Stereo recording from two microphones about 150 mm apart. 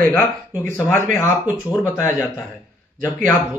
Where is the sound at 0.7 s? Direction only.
15° left (ahead or behind).